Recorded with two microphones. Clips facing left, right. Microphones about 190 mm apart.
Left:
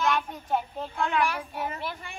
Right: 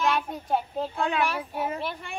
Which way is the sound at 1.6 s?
30° right (ahead or behind).